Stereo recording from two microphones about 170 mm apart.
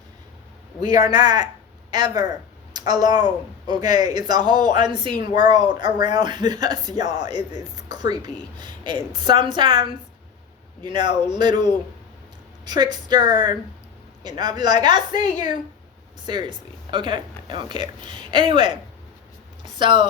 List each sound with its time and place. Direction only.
0.8 s speech: 25° right (ahead or behind)
10.8 s speech: 25° right (ahead or behind)
15.1 s a woman's voice: 45° left (ahead or behind)
16.2 s speech: 25° right (ahead or behind)
19.8 s speech: 25° right (ahead or behind)